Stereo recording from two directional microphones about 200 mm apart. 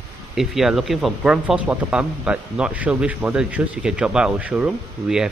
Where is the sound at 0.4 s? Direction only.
Centre (ahead or behind).